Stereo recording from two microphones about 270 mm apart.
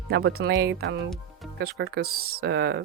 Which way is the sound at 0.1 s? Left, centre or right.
Right.